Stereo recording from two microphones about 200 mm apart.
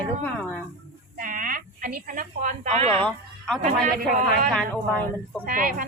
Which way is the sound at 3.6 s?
40° right (ahead or behind).